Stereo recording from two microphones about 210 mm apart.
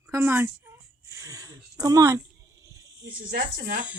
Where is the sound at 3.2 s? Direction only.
45° right (ahead or behind).